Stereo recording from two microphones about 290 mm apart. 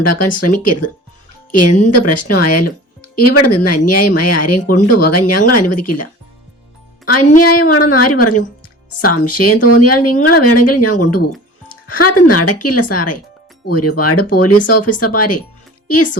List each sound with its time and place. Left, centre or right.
0.0 s speech: left
7.4 s speech: left